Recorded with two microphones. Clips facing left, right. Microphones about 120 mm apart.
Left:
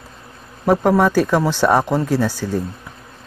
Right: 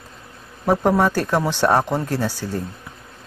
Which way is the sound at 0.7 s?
10° left (ahead or behind).